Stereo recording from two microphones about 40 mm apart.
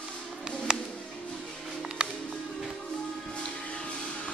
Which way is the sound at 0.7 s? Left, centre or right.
Right.